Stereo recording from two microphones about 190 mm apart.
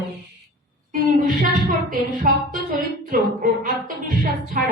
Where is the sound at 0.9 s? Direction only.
45° right (ahead or behind).